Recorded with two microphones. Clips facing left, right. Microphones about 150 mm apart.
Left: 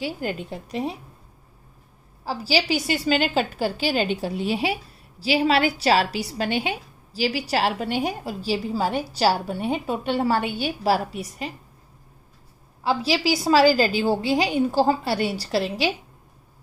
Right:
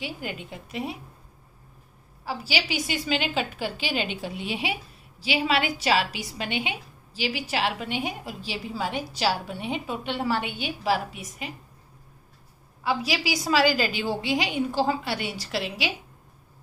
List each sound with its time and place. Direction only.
0.0 s a woman's voice: 40° left (ahead or behind)
2.2 s a woman's voice: 35° left (ahead or behind)
12.8 s a woman's voice: 30° left (ahead or behind)